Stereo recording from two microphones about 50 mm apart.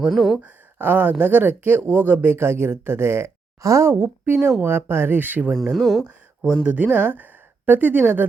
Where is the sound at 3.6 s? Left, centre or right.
Right.